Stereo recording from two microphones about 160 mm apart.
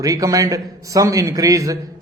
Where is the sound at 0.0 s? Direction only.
20° right (ahead or behind).